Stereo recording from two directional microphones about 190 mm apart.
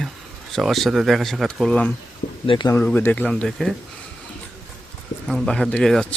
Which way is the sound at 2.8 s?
10° left (ahead or behind).